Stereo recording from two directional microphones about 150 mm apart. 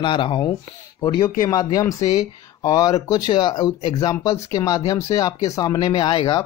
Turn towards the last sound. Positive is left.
turn(degrees=30)  # may be behind; listen again after turning